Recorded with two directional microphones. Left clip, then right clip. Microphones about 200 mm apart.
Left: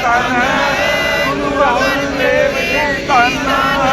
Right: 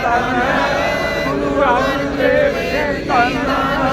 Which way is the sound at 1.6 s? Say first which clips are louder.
Left 2 dB; 25° left (ahead or behind).